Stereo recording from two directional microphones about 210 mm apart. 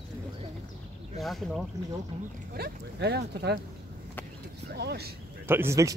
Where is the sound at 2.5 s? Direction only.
50° right (ahead or behind).